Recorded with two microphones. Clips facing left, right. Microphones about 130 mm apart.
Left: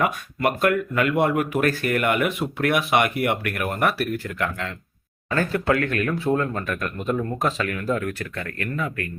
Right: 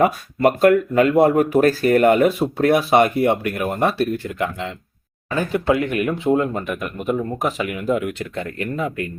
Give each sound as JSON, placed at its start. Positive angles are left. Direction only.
{"t": 0.0, "sound": "speech", "side_deg": -35}